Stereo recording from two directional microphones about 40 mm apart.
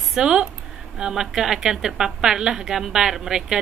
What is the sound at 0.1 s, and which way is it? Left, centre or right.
Speech, centre.